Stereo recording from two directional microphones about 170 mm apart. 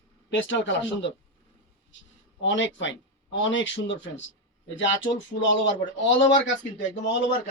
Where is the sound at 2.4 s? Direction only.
90° left.